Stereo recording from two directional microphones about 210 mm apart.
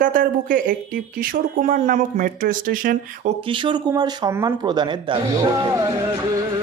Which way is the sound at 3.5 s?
25° right (ahead or behind).